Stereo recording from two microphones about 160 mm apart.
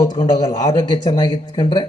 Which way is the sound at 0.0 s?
25° left (ahead or behind).